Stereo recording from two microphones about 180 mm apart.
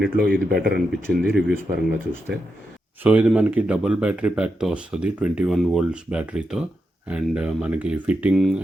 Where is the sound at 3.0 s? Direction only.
5° right (ahead or behind).